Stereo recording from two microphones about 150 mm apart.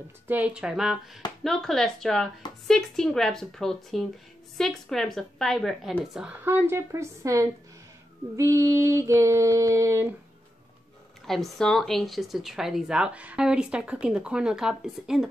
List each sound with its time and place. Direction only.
0.3 s speech: 10° right (ahead or behind)
6.1 s speech: 10° right (ahead or behind)
8.4 s female singing: 20° right (ahead or behind)
11.2 s speech: centre (ahead or behind)